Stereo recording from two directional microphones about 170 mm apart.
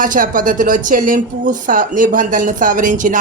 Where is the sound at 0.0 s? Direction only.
55° right (ahead or behind).